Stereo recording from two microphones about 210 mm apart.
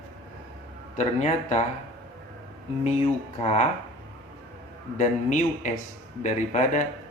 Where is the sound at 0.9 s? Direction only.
35° left (ahead or behind).